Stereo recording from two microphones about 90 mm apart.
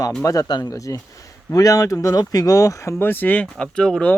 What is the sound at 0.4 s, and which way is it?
Speech, 50° left (ahead or behind).